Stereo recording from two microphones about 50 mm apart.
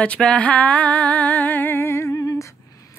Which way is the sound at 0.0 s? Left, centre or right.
Left.